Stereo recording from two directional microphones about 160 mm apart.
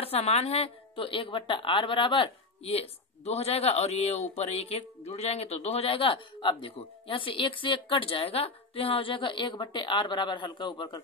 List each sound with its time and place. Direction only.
0.0 s a woman's voice: 40° left (ahead or behind)